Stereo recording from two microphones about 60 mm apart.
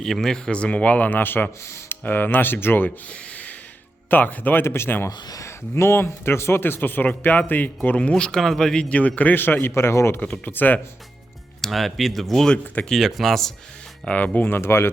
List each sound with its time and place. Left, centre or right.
0.0 s a man's voice: centre; by 1.5 s left
1.6 s speech: left
2.0 s speech: left
3.1 s a sound: left
4.1 s speech: left
4.6 s speech: left
5.0 s a man's voice: left
8.1 s a man's voice: centre; by 10.2 s left
10.4 s speech: left
11.6 s speech: centre
14.0 s a man's voice: left
14.5 s speech: left